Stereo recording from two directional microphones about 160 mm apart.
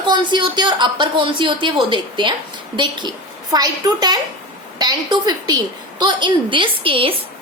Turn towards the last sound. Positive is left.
turn(degrees=-35)  # may be behind; listen again after turning